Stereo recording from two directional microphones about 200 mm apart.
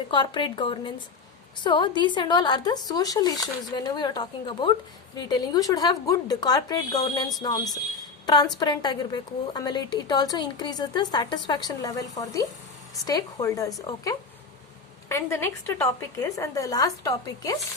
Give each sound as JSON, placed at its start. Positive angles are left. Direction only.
{"t": 0.1, "sound": "a woman's voice", "side_deg": 25}
{"t": 15.1, "sound": "a woman's voice", "side_deg": 15}